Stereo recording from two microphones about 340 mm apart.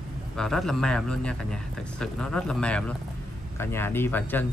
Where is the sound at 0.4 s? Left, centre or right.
Centre.